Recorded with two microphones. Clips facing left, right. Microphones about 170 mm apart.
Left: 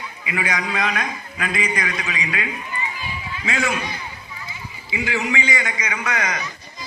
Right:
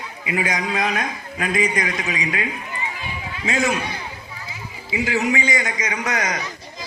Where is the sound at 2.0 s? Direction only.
45° right (ahead or behind).